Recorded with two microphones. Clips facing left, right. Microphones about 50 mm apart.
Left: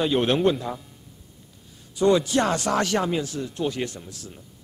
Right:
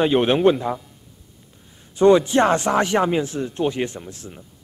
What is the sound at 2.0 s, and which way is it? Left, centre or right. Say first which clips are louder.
Speech: right 6 dB; right.